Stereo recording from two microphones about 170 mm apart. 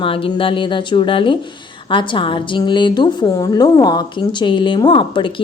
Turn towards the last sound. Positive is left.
turn(degrees=30)  # may be behind; listen again after turning